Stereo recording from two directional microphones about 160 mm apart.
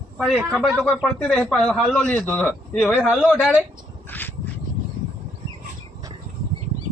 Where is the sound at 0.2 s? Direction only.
5° right (ahead or behind).